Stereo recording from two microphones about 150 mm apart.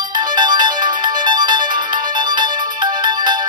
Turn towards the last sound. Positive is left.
turn(degrees=-30)  # may be behind; listen again after turning